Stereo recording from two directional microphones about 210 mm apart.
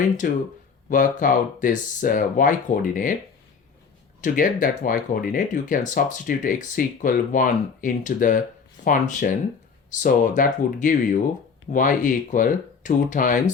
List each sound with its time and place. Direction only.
0.2 s speech: 40° left (ahead or behind)
4.2 s speech: 40° left (ahead or behind)